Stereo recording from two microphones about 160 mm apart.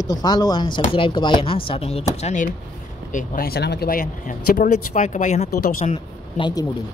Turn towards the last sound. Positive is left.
turn(degrees=30)  # may be behind; listen again after turning